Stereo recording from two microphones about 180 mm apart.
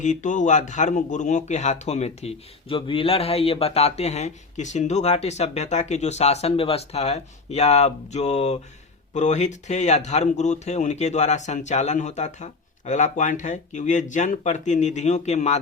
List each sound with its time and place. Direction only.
0.0 s speech: 45° left (ahead or behind)